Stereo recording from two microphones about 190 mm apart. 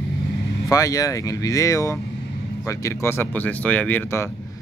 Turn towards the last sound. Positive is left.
turn(degrees=10)  # may be behind; listen again after turning